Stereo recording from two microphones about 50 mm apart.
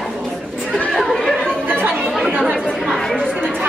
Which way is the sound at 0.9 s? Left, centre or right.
Centre.